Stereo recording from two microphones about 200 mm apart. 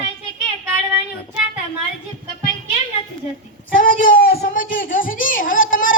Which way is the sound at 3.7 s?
45° left (ahead or behind).